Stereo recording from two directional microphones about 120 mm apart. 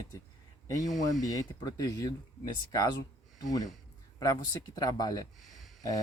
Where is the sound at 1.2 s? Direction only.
30° left (ahead or behind).